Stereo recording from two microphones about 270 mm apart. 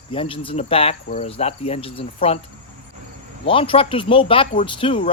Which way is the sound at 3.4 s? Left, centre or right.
Centre.